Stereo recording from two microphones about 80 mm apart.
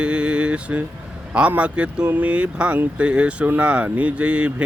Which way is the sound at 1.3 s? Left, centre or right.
Centre.